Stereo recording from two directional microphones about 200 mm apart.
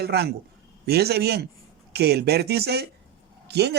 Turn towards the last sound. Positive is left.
turn(degrees=-55)  # may be behind; listen again after turning